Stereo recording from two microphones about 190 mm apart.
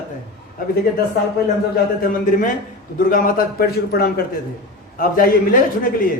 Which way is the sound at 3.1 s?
50° left (ahead or behind).